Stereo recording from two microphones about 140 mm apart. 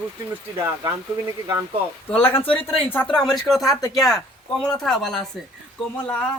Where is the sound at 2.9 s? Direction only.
10° left (ahead or behind).